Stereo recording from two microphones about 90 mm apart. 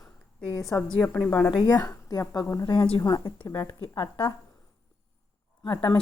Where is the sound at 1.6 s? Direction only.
45° left (ahead or behind).